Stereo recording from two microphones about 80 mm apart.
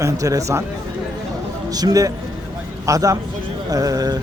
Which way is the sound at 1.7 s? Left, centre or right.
Right.